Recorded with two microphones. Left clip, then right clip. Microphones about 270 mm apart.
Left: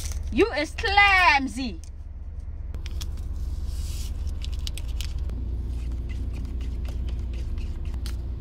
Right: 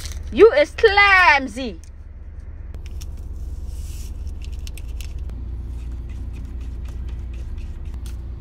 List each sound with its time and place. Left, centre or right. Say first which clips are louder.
0.4 s a woman's voice: right 12 dB; centre
6.1 s a sound: left 1 dB; centre
6.7 s vehicle: left 1 dB; centre